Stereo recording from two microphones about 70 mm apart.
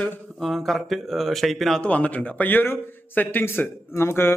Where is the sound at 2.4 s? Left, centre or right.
Left.